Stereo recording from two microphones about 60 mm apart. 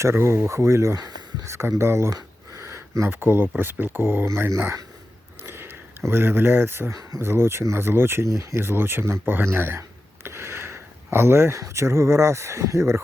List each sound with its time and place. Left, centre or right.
0.0 s speech: right
0.9 s speech: right
1.5 s speech: right
2.0 s a sound: right
3.0 s speech: right
5.4 s a sound: right
6.1 s speech: right
8.6 s speech: right
10.2 s a sound: right
11.5 s speech: right